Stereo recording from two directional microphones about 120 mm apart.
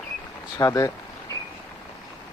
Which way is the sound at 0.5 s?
30° left (ahead or behind).